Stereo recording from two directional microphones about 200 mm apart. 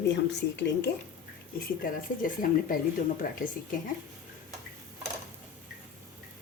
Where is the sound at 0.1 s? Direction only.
60° left (ahead or behind).